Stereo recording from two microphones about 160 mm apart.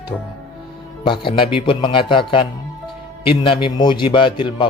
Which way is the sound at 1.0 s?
30° left (ahead or behind).